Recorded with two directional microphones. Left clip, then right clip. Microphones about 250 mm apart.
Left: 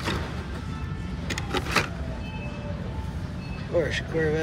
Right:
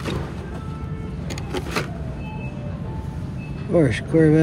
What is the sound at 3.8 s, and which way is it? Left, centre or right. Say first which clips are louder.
Speech: right 10 dB; centre.